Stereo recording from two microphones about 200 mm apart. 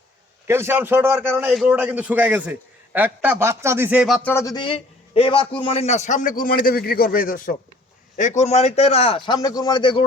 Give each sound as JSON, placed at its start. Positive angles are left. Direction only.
{"t": 0.4, "sound": "a man's voice", "side_deg": -10}